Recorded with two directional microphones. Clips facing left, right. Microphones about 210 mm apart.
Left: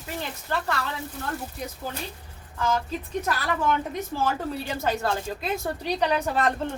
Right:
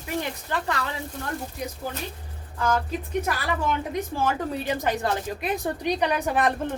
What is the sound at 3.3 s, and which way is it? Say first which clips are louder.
A woman's voice: left 4 dB; 15° right (ahead or behind).